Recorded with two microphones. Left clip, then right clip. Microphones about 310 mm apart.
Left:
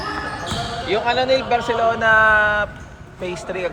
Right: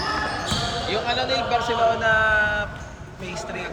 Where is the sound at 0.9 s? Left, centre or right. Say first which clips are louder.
Left 8 dB; centre.